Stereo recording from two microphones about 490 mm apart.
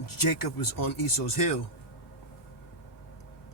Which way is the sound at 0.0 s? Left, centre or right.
Left.